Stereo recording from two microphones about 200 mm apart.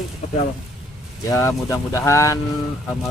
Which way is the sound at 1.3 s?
15° left (ahead or behind).